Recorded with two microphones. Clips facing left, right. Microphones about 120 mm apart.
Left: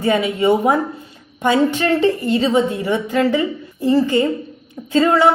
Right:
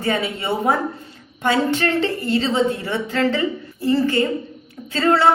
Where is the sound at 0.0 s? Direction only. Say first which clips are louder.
Left 6 dB; 15° left (ahead or behind).